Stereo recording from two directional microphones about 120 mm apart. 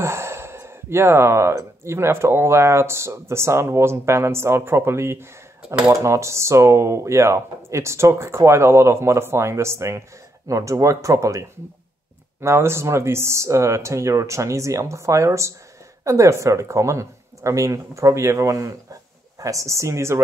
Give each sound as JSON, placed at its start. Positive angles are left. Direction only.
{"t": 0.0, "sound": "speech", "side_deg": -20}